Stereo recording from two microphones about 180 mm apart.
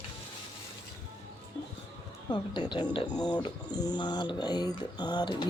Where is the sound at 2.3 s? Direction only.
25° left (ahead or behind).